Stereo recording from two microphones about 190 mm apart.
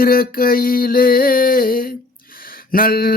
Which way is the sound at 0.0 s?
50° left (ahead or behind).